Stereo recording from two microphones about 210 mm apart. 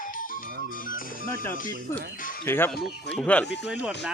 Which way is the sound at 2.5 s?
10° left (ahead or behind).